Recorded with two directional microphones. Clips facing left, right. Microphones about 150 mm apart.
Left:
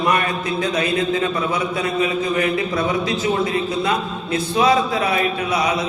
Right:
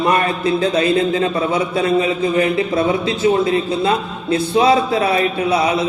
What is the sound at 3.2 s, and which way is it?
A man's voice, 30° right (ahead or behind).